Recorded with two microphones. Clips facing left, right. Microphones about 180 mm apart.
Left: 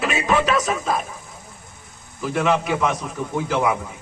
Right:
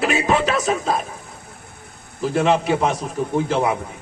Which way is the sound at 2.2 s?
30° right (ahead or behind).